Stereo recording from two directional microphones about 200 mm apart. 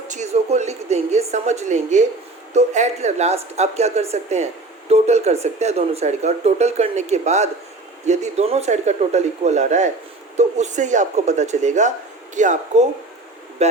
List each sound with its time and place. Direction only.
0.1 s speech: 35° right (ahead or behind)